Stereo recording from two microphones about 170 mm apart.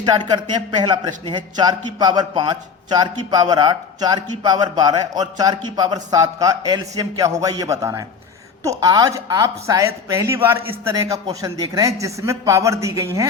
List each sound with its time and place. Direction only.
0.0 s speech: 25° right (ahead or behind)